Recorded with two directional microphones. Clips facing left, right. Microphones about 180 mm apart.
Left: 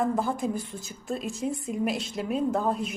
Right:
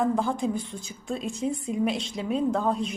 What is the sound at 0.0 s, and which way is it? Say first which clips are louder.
A woman's voice: right 1 dB; centre (ahead or behind).